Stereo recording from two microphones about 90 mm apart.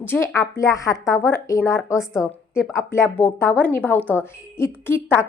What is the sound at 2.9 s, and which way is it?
A woman's voice, 20° left (ahead or behind).